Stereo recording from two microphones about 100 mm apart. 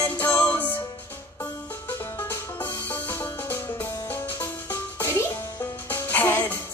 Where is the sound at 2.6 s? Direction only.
20° left (ahead or behind).